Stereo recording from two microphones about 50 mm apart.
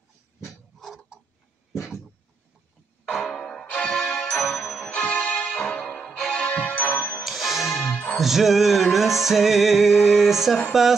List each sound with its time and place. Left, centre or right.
1.7 s a sound: centre
3.3 s music: centre
4.4 s ding: centre
4.8 s music: left
5.5 s music: centre
6.3 s music: left
7.2 s music: centre
10.0 s a sound: centre
10.7 s speech: centre